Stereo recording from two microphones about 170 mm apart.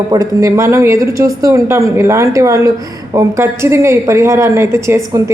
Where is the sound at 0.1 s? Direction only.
20° right (ahead or behind).